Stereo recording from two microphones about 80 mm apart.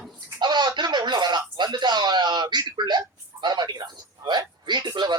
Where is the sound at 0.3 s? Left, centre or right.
Right.